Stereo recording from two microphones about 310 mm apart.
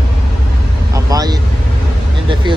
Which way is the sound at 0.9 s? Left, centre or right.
Centre.